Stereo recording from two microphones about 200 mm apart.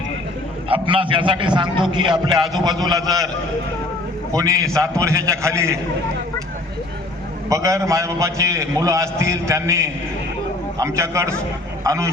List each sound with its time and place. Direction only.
0.7 s a man's voice: 25° right (ahead or behind)
4.4 s a man's voice: 15° right (ahead or behind)
7.5 s a man's voice: 15° right (ahead or behind)